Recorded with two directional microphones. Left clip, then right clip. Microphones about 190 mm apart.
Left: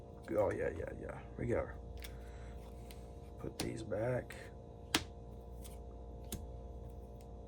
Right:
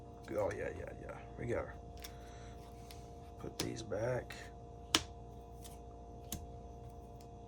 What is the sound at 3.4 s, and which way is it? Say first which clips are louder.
Speech: even; 5° right (ahead or behind).